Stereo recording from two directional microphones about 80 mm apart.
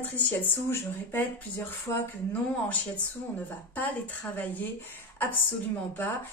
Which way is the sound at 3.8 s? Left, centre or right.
Left.